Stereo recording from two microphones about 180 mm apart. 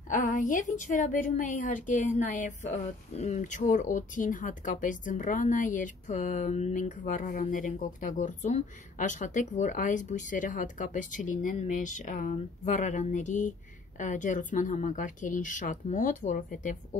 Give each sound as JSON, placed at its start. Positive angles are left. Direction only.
{"t": 0.1, "sound": "speech", "side_deg": 50}